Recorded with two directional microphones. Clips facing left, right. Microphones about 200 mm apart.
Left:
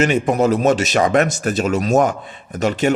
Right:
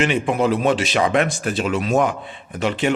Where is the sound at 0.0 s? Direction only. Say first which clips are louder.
Left 3 dB; 40° left (ahead or behind).